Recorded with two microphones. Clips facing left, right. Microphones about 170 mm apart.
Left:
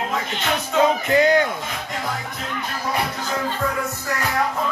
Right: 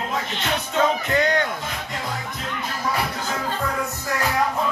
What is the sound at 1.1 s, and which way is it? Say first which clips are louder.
Speech: left 5 dB; 5° left (ahead or behind).